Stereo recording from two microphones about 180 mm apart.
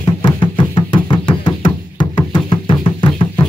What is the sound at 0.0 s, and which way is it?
Music, 25° left (ahead or behind).